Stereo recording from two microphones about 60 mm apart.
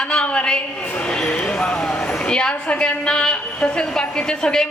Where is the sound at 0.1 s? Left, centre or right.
Centre.